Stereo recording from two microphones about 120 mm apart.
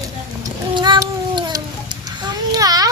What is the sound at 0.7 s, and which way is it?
Cat, 40° right (ahead or behind).